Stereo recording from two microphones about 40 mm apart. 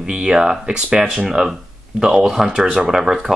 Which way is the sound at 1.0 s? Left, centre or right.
Centre.